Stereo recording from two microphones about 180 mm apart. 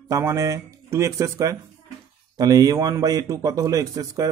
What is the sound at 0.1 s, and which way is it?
Speech, 20° right (ahead or behind).